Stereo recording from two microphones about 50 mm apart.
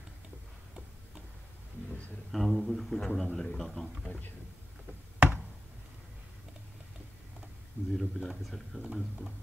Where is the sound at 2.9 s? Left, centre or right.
Centre.